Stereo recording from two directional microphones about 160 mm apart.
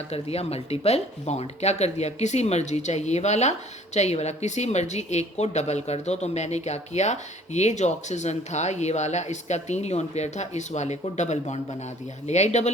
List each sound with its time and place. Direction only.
0.1 s a woman's voice: 40° left (ahead or behind)